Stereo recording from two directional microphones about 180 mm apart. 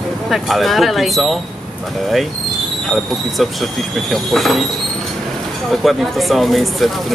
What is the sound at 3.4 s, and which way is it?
Speech, centre (ahead or behind).